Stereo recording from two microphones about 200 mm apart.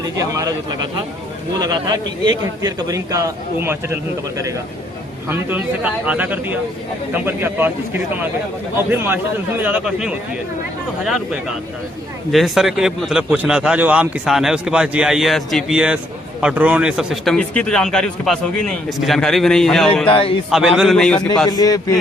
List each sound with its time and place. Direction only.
0.0 s a man's voice: 15° right (ahead or behind)
5.3 s a man's voice: 10° right (ahead or behind)
20.1 s a man's voice: 25° left (ahead or behind)
20.5 s a man's voice: centre (ahead or behind)
21.5 s a man's voice: 20° left (ahead or behind)